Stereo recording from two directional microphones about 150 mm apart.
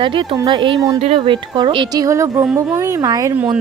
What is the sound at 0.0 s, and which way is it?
Speech, 35° right (ahead or behind).